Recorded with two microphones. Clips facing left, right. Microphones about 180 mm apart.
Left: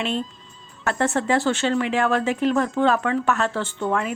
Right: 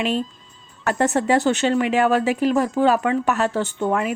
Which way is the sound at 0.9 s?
15° right (ahead or behind).